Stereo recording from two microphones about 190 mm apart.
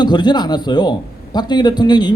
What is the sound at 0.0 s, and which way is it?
A man's voice, 20° left (ahead or behind).